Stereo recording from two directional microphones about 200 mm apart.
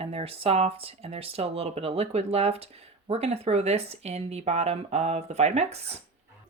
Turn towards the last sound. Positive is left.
turn(degrees=-30)  # may be behind; listen again after turning